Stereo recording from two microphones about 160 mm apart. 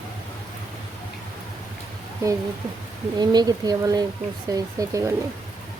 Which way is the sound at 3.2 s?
25° right (ahead or behind).